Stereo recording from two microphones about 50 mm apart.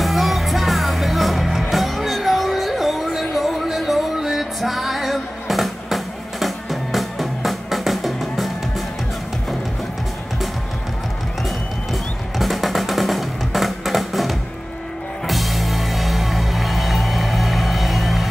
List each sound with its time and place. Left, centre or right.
0.0 s music: centre
11.4 s music: centre